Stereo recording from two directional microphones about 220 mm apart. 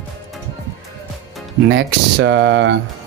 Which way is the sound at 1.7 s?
55° right (ahead or behind).